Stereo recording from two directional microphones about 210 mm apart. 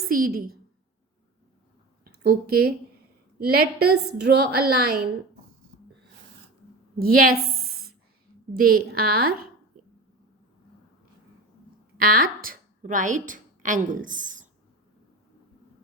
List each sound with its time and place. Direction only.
0.1 s a woman's voice: 45° right (ahead or behind)
2.2 s a woman's voice: 45° right (ahead or behind)
7.0 s a woman's voice: 45° right (ahead or behind)
11.9 s a woman's voice: 45° right (ahead or behind)